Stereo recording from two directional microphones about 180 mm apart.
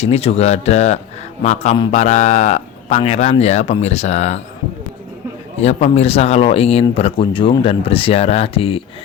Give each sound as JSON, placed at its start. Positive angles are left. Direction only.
{"t": 0.0, "sound": "speech", "side_deg": 35}
{"t": 5.5, "sound": "speech", "side_deg": 35}